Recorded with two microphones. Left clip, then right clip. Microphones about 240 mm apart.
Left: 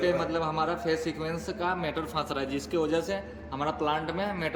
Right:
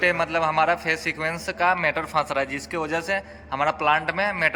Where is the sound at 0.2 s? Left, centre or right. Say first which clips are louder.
Right 6 dB; right.